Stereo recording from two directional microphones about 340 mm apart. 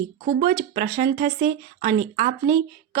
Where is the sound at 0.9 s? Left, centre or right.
Right.